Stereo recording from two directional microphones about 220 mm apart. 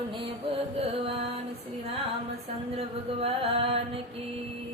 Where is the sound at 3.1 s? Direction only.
25° right (ahead or behind).